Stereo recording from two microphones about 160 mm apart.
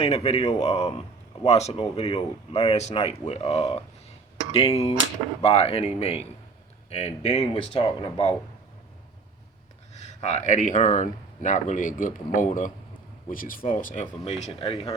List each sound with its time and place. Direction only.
0.0 s speech: 40° left (ahead or behind)
7.7 s speech: 30° left (ahead or behind)
9.9 s speech: 45° left (ahead or behind)